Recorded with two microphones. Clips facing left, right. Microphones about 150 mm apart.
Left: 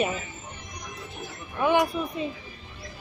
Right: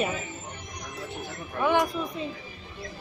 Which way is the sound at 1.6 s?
10° left (ahead or behind).